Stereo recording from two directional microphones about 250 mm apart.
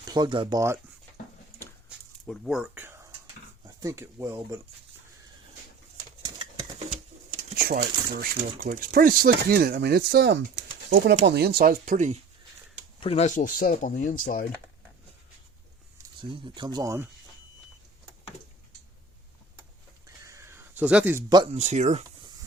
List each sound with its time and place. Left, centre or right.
0.1 s speech: centre
2.2 s speech: centre
7.5 s speech: right
13.0 s speech: left
16.3 s speech: centre
20.2 s speech: centre; by 22.0 s right